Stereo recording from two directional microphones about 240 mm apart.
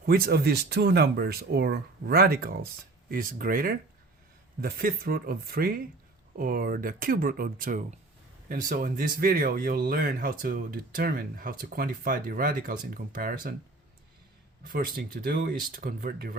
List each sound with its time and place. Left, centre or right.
0.0 s speech: right
14.6 s speech: right